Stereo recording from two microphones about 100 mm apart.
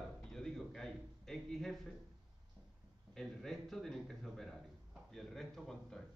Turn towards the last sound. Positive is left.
turn(degrees=5)  # may be behind; listen again after turning